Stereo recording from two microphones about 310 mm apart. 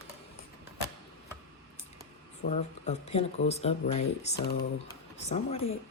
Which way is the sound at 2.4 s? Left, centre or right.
Left.